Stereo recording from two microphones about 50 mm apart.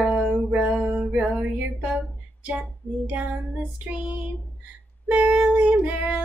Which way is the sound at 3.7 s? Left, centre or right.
Right.